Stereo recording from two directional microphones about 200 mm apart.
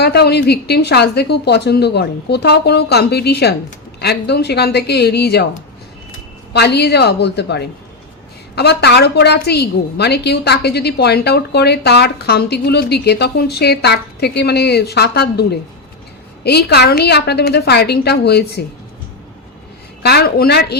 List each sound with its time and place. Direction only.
0.0 s a woman's voice: 55° left (ahead or behind)
6.5 s a woman's voice: 55° left (ahead or behind)
20.0 s a woman's voice: 55° left (ahead or behind)